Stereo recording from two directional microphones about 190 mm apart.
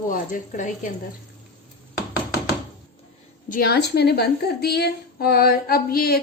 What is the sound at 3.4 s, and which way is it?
A woman's voice, 50° left (ahead or behind).